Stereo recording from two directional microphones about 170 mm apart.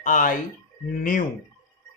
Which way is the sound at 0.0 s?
50° left (ahead or behind).